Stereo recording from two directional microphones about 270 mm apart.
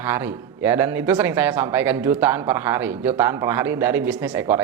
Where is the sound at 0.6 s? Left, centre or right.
Centre.